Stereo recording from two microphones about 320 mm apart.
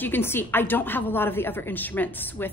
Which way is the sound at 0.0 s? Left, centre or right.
Centre.